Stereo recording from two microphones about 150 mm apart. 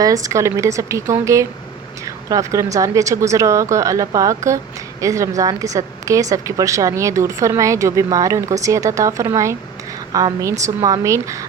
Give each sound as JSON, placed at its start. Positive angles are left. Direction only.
{"t": 0.0, "sound": "a woman's voice", "side_deg": -20}